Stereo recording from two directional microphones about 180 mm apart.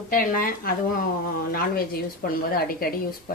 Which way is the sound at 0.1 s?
50° left (ahead or behind).